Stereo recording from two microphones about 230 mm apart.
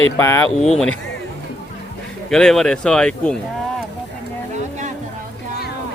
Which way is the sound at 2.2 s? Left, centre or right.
Centre.